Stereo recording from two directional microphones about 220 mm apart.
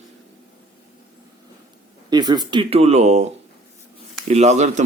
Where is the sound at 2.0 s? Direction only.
20° right (ahead or behind).